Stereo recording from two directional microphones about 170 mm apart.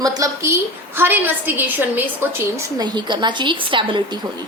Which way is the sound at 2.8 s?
25° right (ahead or behind).